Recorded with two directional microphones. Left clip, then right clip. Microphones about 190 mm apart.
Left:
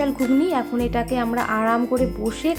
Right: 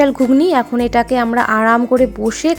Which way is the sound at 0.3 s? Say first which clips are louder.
Right 8 dB; 45° right (ahead or behind).